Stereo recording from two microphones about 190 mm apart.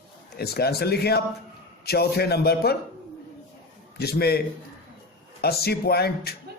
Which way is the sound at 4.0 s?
55° left (ahead or behind).